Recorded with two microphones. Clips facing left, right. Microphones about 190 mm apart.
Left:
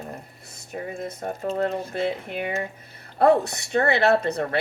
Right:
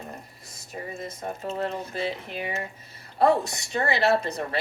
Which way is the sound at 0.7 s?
60° left (ahead or behind).